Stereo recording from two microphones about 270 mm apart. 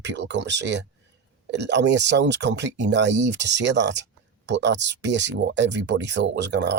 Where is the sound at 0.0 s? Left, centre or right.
Right.